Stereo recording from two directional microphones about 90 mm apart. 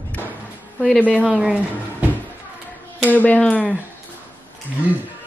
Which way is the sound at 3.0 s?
20° left (ahead or behind).